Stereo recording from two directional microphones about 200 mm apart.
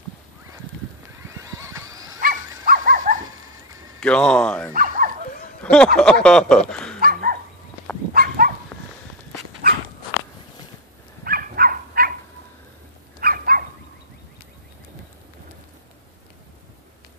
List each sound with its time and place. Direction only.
1.2 s a sound: 15° right (ahead or behind)
2.2 s dog: 45° right (ahead or behind)
4.0 s speech: 5° left (ahead or behind)
4.7 s dog: 40° right (ahead or behind)
5.6 s a sound: 5° left (ahead or behind)
5.9 s speech: 5° left (ahead or behind)
7.0 s dog: 45° right (ahead or behind)
11.2 s dog: 45° right (ahead or behind)
13.2 s dog: 45° right (ahead or behind)